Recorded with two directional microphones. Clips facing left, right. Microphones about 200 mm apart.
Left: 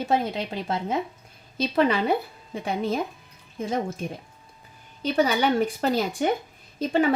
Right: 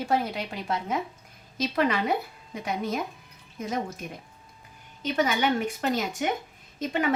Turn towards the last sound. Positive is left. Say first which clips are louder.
# left 5 dB
turn(degrees=30)  # may be behind; listen again after turning